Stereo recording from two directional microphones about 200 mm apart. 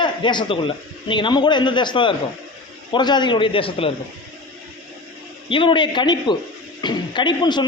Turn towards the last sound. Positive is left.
turn(degrees=20)  # may be behind; listen again after turning